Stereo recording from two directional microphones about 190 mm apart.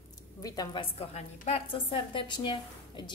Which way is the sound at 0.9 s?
30° left (ahead or behind).